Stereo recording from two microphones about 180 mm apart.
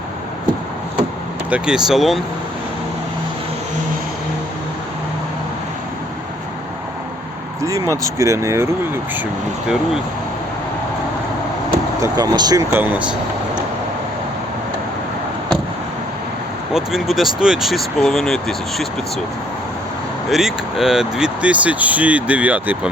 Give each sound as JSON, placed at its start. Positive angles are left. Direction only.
{"t": 1.5, "sound": "speech", "side_deg": -5}
{"t": 7.6, "sound": "a sound", "side_deg": -20}
{"t": 8.0, "sound": "speech", "side_deg": -15}
{"t": 12.0, "sound": "speech", "side_deg": -20}
{"t": 12.7, "sound": "speech", "side_deg": -10}
{"t": 16.7, "sound": "speech", "side_deg": 0}
{"t": 20.3, "sound": "speech", "side_deg": 0}